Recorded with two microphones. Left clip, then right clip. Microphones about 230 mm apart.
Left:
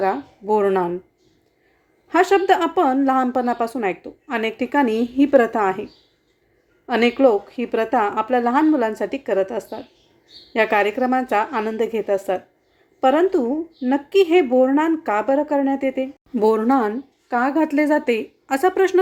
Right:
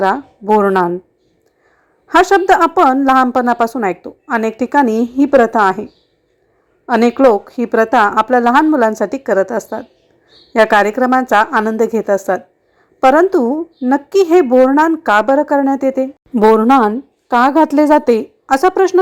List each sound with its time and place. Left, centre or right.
0.0 s speech: centre
2.0 s speech: right